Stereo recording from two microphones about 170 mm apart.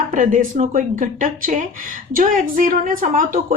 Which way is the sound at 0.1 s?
50° right (ahead or behind).